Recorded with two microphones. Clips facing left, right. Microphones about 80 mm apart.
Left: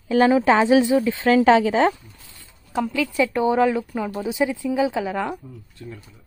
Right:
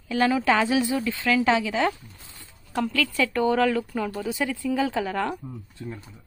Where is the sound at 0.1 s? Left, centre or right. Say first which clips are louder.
Left 5 dB; left.